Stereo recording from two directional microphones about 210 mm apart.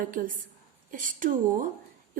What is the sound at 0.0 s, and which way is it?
A woman's voice, 40° right (ahead or behind).